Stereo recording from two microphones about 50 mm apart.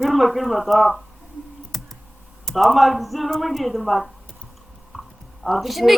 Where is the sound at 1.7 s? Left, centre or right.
Centre.